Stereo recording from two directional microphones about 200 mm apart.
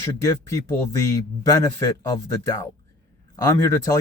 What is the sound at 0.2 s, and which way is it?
Speech, 15° left (ahead or behind).